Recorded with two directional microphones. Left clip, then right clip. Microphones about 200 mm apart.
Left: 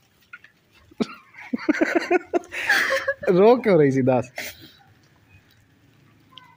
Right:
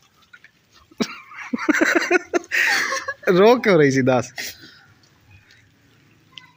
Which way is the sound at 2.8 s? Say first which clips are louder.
Left 2 dB; 35° left (ahead or behind).